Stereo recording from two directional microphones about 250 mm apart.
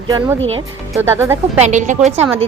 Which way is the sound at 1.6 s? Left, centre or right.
Right.